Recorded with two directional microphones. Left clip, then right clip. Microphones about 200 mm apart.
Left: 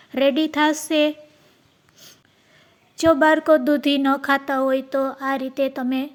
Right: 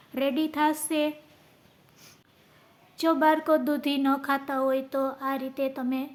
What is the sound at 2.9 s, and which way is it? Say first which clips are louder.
Speech: left 7 dB; 30° left (ahead or behind).